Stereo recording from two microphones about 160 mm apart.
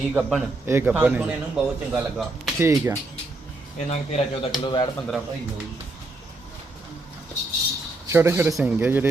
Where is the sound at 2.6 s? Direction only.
20° right (ahead or behind).